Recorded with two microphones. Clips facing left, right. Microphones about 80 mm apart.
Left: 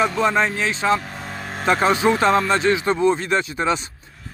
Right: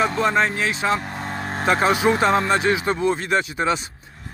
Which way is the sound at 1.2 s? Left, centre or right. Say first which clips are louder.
Right 3 dB; right.